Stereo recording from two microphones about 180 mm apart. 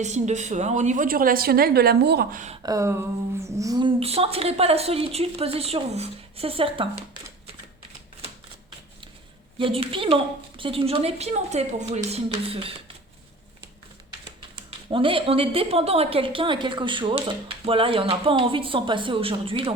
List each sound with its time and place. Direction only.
0.0 s a woman's voice: 40° right (ahead or behind); by 2.4 s 65° right (ahead or behind)
2.6 s a woman's voice: 15° right (ahead or behind)
9.6 s a woman's voice: 30° right (ahead or behind)
14.8 s a woman's voice: 30° right (ahead or behind)